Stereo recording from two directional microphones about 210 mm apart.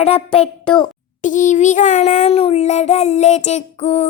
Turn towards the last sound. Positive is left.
turn(degrees=30)  # may be behind; listen again after turning